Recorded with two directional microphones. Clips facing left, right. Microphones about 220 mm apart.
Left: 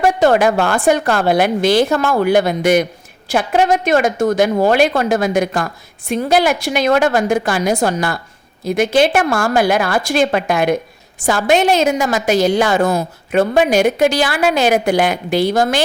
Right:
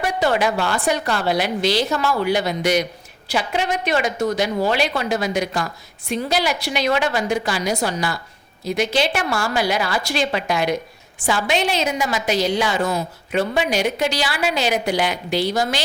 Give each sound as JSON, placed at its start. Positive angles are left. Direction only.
{"t": 0.0, "sound": "a woman's voice", "side_deg": 50}